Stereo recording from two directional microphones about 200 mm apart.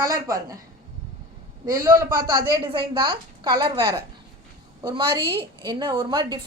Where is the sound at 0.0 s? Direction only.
15° right (ahead or behind).